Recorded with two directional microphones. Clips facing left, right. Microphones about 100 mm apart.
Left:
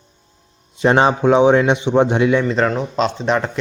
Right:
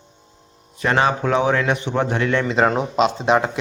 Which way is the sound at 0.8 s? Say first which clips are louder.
Left 5 dB; 25° left (ahead or behind).